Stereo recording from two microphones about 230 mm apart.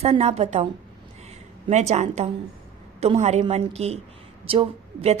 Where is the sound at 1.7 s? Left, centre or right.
Right.